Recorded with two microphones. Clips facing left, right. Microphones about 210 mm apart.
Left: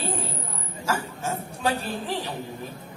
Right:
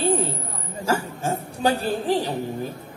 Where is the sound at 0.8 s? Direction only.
35° right (ahead or behind).